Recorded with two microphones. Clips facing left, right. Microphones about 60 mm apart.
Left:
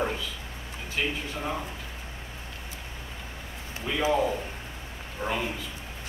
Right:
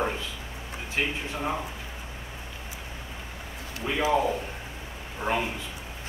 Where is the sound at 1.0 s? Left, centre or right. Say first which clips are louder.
Right 1 dB; right.